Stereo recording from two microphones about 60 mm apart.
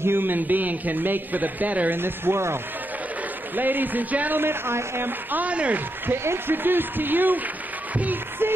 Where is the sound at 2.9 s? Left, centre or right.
Right.